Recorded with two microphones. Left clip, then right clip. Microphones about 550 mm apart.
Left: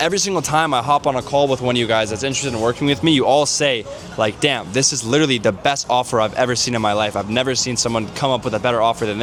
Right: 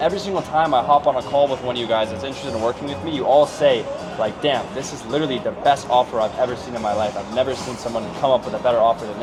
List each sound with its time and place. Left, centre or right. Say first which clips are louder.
0.0 s speech: left 2 dB; left
3.2 s speech: right 5 dB; left
7.9 s speech: right 5 dB; left